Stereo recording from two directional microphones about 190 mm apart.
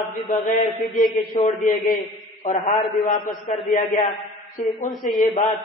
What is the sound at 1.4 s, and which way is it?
A man's voice, 45° left (ahead or behind).